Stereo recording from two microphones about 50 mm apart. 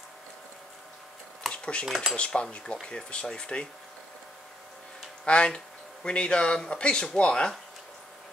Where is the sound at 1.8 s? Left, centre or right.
Centre.